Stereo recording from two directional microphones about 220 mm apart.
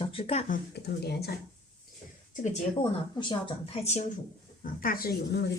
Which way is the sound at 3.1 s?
20° left (ahead or behind).